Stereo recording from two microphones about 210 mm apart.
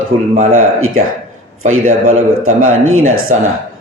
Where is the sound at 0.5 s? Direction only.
80° right.